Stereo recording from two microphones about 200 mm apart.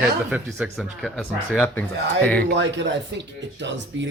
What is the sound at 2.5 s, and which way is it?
Speech, 65° right (ahead or behind).